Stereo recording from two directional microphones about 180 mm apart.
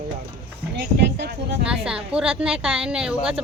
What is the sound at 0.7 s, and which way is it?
Speech, 65° right (ahead or behind).